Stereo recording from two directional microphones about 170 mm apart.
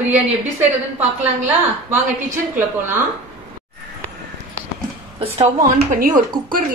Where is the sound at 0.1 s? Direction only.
10° right (ahead or behind).